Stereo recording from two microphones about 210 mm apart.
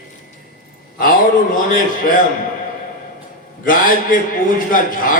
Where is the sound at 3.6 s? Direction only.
40° left (ahead or behind).